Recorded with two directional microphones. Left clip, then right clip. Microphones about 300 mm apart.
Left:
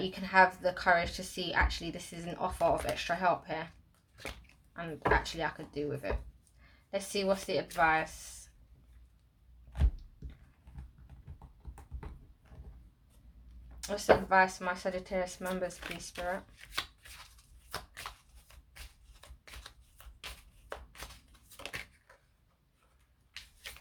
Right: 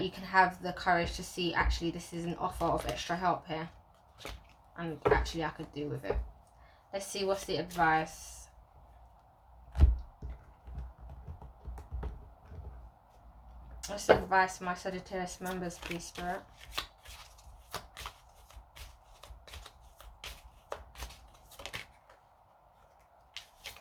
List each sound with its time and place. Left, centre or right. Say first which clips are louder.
0.1 s a woman's voice: left 2 dB; centre
4.7 s a woman's voice: right 1 dB; left
13.8 s a woman's voice: even; centre
15.8 s speech: even; centre
16.6 s chopping: left 1 dB; centre
17.7 s shuffling cards: even; centre
21.5 s a sound: even; centre